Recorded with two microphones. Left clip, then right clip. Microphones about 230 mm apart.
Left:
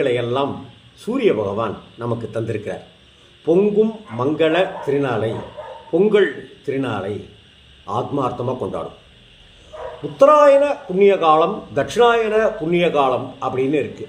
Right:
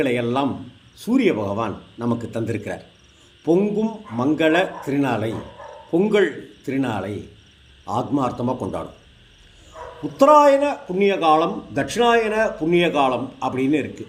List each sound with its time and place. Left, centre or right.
0.0 s a man's voice: right
10.2 s a man's voice: right